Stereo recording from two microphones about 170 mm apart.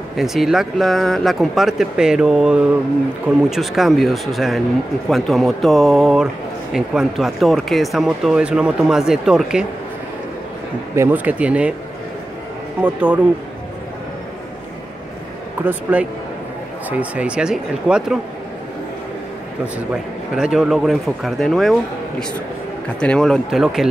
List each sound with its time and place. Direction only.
0.1 s speech: centre (ahead or behind)
11.0 s speech: 10° right (ahead or behind)
12.8 s speech: 10° right (ahead or behind)
15.6 s speech: 10° right (ahead or behind)
19.6 s speech: 5° right (ahead or behind)
22.9 s speech: 5° left (ahead or behind)